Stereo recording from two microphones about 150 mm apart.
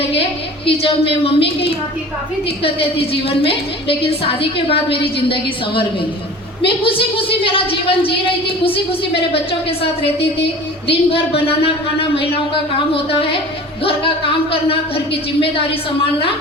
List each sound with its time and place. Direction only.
0.1 s a woman's voice: 40° left (ahead or behind)